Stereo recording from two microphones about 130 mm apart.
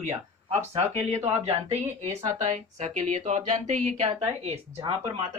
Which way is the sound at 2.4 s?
65° right (ahead or behind).